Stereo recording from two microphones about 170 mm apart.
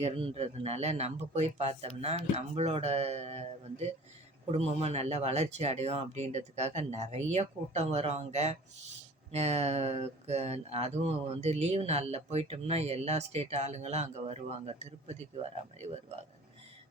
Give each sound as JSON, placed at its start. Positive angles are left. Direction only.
{"t": 0.0, "sound": "speech", "side_deg": -35}